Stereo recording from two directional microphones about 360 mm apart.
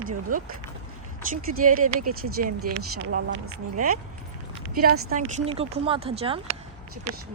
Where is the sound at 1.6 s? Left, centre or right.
Right.